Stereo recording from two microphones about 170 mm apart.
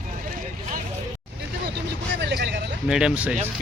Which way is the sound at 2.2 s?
80° right.